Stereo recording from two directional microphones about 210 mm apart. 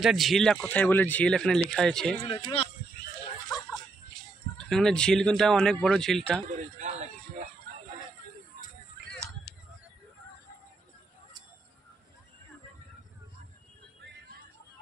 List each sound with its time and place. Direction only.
0.0 s speech: centre (ahead or behind)
2.2 s speech: 25° left (ahead or behind)
4.6 s speech: centre (ahead or behind)
6.4 s a sound: 35° right (ahead or behind)